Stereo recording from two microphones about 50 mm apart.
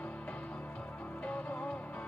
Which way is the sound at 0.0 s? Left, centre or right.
Left.